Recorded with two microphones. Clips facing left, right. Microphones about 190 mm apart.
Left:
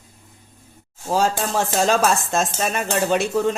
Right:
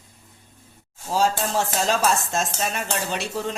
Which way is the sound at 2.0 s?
50° left (ahead or behind).